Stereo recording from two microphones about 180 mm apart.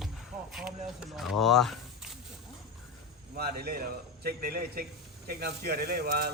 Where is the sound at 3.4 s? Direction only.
60° right (ahead or behind).